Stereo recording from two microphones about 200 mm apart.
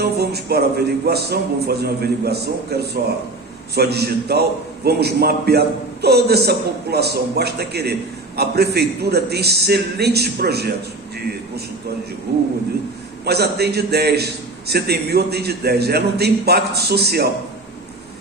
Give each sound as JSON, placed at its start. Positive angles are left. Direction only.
{"t": 0.0, "sound": "a man's voice", "side_deg": -55}
{"t": 12.3, "sound": "a man's voice", "side_deg": -50}